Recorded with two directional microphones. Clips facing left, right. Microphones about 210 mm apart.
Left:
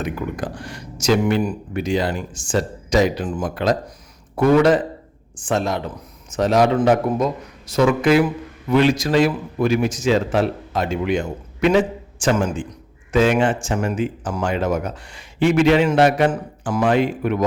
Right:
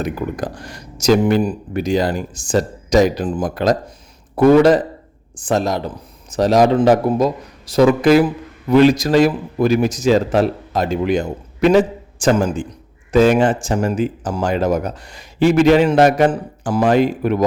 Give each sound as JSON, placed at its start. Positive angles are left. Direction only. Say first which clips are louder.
{"t": 0.0, "sound": "speech", "louder": "right 3 dB", "side_deg": -40}